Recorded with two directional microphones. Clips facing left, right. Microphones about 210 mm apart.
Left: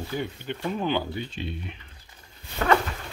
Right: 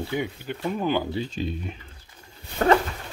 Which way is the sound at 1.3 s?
40° right (ahead or behind).